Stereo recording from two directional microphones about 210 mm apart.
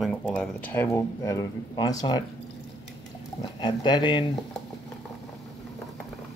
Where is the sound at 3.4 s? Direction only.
25° left (ahead or behind).